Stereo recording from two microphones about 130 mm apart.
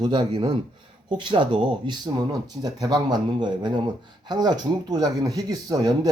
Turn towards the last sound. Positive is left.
turn(degrees=-30)  # may be behind; listen again after turning